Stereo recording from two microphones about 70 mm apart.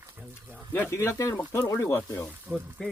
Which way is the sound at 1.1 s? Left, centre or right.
Left.